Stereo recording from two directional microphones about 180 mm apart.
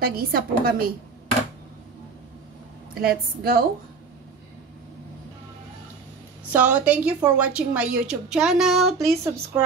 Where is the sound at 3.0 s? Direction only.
60° right (ahead or behind).